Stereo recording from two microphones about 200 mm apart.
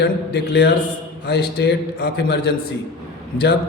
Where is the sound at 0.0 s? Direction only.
55° left (ahead or behind).